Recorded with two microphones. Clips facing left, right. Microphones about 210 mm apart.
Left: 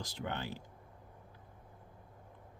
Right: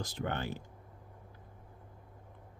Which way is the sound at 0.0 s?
50° right (ahead or behind).